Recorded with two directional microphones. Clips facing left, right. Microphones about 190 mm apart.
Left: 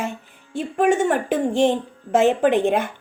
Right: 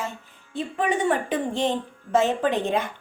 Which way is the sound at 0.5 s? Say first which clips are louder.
Left 6 dB; 50° left (ahead or behind).